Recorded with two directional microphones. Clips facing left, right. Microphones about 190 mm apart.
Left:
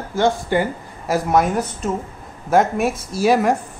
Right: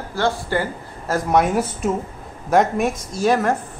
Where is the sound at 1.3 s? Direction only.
Centre (ahead or behind).